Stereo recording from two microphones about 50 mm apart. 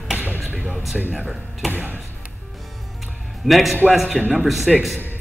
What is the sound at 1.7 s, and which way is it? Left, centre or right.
Speech, right.